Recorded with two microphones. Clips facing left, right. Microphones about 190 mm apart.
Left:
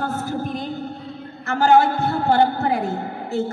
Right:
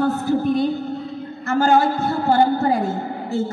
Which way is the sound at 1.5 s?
60° left (ahead or behind).